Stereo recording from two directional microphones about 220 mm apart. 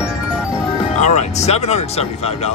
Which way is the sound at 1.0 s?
30° left (ahead or behind).